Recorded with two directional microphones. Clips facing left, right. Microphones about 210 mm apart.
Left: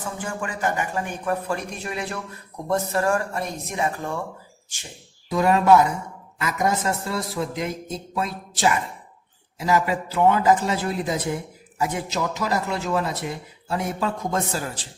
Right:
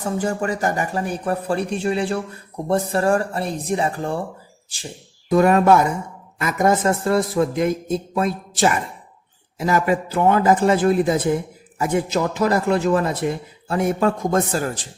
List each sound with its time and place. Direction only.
0.0 s speech: 40° right (ahead or behind)
5.3 s a man's voice: 50° right (ahead or behind)